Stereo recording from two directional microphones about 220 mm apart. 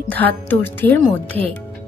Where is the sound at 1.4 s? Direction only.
30° right (ahead or behind).